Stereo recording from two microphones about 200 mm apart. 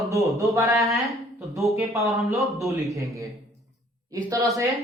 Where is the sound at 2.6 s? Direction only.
15° right (ahead or behind).